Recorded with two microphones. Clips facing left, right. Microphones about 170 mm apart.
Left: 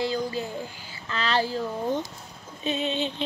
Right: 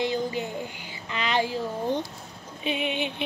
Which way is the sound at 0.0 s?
20° right (ahead or behind).